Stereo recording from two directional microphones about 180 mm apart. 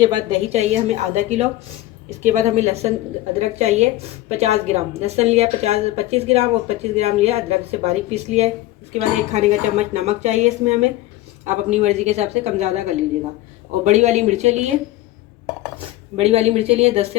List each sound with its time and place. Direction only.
0.0 s a woman's voice: 30° right (ahead or behind)
16.1 s a woman's voice: 35° right (ahead or behind)